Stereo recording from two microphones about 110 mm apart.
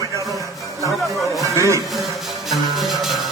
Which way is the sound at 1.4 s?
30° right (ahead or behind).